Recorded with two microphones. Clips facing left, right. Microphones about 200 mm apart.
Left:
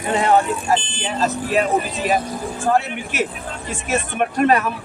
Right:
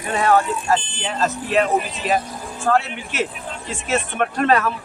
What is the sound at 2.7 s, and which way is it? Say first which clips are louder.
A man's voice: even; 15° left (ahead or behind).